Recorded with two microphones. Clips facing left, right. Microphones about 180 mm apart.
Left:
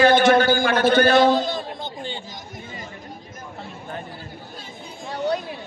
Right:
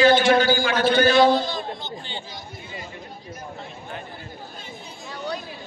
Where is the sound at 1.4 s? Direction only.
50° left (ahead or behind).